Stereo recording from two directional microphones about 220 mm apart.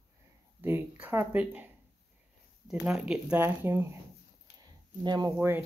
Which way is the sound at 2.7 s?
Centre (ahead or behind).